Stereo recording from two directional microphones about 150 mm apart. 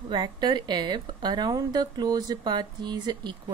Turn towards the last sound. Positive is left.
turn(degrees=-30)  # may be behind; listen again after turning